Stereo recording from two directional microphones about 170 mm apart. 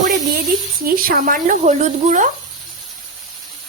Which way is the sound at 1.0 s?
55° right (ahead or behind).